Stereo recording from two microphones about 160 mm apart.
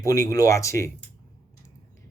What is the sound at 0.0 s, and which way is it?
Speech, 20° left (ahead or behind).